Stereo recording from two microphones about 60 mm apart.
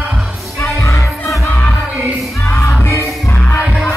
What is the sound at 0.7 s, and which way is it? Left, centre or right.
Music, left.